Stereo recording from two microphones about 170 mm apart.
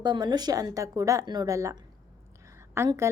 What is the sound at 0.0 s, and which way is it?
A woman's voice, 25° right (ahead or behind).